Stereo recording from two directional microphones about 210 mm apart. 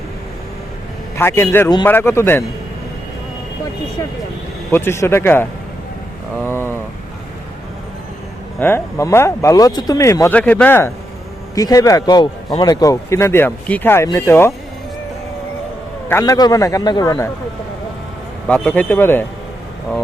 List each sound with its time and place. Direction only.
1.2 s speech: 10° left (ahead or behind)
4.7 s speech: 10° left (ahead or behind)
6.3 s a sound: 10° left (ahead or behind)
8.5 s speech: 10° left (ahead or behind)
16.0 s speech: 15° left (ahead or behind)
18.4 s speech: 5° left (ahead or behind)